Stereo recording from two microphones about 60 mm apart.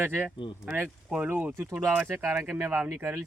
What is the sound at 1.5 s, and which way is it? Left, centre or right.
Speech, right.